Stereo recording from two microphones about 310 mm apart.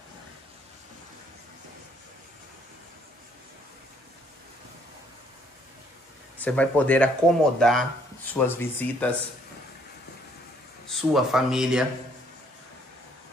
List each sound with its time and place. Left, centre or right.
6.4 s speech: centre
10.9 s speech: centre